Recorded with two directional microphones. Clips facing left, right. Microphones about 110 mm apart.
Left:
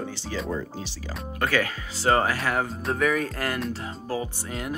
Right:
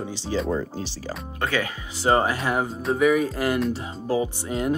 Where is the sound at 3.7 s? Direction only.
20° right (ahead or behind).